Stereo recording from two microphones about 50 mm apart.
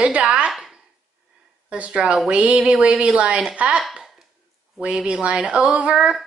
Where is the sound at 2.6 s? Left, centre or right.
Centre.